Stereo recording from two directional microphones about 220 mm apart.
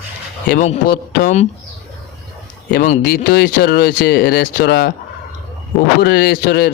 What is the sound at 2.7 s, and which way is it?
Speech, 40° left (ahead or behind).